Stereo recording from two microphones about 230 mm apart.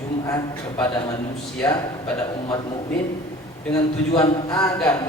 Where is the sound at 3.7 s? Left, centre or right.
Centre.